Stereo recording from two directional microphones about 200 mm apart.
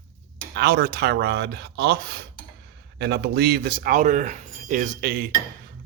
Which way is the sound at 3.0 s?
55° right (ahead or behind).